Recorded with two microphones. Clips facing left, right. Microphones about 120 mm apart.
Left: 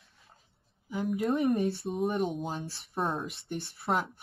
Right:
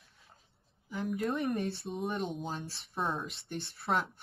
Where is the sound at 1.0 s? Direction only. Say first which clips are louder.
Left 5 dB; centre (ahead or behind).